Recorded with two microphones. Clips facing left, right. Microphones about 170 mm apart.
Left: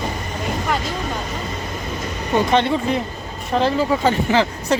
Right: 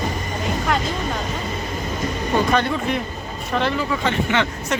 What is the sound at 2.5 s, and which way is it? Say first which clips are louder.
Speech: left 2 dB; 25° left (ahead or behind).